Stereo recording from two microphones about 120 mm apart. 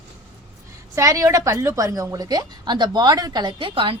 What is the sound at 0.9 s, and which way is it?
A woman's voice, 25° right (ahead or behind).